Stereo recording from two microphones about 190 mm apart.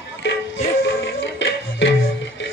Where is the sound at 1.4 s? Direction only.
75° left (ahead or behind).